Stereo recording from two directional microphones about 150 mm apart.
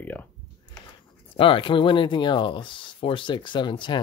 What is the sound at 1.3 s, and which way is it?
Speech, 35° left (ahead or behind).